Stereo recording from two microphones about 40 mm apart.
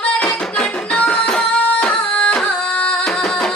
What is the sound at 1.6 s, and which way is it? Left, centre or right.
Music, left.